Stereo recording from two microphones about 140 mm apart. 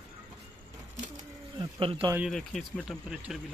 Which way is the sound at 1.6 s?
40° right (ahead or behind).